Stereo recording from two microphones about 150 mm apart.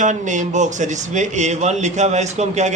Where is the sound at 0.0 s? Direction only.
55° right (ahead or behind).